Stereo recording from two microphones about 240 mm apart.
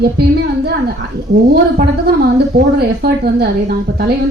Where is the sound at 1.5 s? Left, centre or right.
Right.